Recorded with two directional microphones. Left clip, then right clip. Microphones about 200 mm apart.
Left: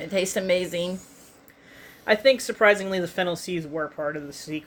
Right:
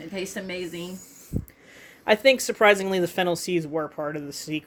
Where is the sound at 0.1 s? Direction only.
50° left (ahead or behind).